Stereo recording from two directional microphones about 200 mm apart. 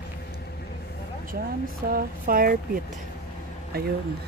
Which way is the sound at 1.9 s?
45° right (ahead or behind).